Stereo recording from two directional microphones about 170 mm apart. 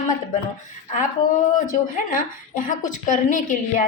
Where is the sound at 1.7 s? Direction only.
50° left (ahead or behind).